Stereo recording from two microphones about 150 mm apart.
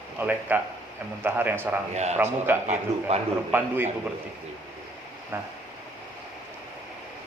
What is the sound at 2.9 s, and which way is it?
Speech, 50° right (ahead or behind).